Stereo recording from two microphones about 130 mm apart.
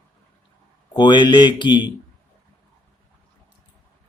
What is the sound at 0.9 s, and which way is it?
Speech, 35° left (ahead or behind).